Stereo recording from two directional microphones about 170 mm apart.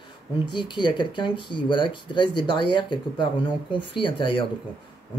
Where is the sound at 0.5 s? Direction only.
25° left (ahead or behind).